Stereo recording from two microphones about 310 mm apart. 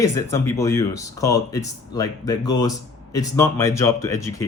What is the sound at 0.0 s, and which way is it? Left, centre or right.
Speech, centre.